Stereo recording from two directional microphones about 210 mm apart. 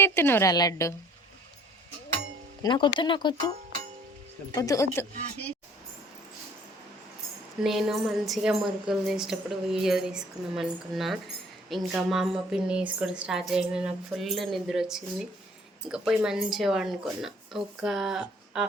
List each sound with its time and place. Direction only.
0.0 s a woman's voice: 10° left (ahead or behind)
2.6 s speech: 20° left (ahead or behind)
4.5 s a woman's voice: 15° left (ahead or behind)
7.6 s a woman's voice: centre (ahead or behind)